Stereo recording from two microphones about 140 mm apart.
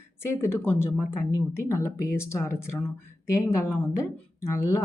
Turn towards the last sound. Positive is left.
turn(degrees=20)  # may be behind; listen again after turning